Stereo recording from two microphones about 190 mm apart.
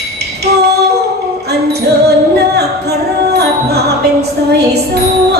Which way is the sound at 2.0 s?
60° right (ahead or behind).